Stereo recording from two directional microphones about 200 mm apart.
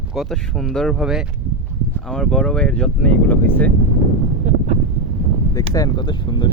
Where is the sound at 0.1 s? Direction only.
Centre (ahead or behind).